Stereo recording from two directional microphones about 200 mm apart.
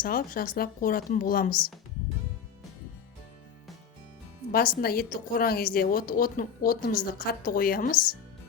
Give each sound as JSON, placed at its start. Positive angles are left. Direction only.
{"t": 0.0, "sound": "a woman's voice", "side_deg": 45}
{"t": 4.5, "sound": "a woman's voice", "side_deg": 50}